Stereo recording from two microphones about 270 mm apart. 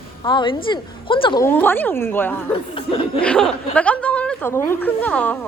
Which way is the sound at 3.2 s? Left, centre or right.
Centre.